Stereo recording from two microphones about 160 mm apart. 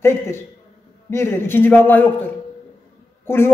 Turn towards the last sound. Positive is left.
turn(degrees=15)  # may be behind; listen again after turning